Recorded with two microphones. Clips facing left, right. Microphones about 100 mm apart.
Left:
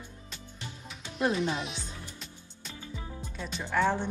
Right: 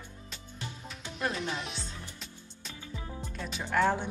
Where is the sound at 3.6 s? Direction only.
5° right (ahead or behind).